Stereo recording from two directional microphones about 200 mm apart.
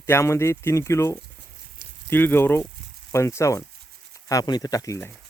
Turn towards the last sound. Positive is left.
turn(degrees=15)  # may be behind; listen again after turning